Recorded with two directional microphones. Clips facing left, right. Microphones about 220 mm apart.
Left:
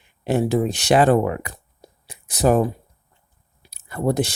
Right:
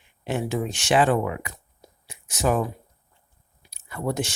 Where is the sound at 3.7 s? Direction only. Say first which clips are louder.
Left 6 dB; 35° left (ahead or behind).